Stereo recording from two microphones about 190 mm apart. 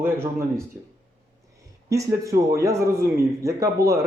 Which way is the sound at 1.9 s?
15° right (ahead or behind).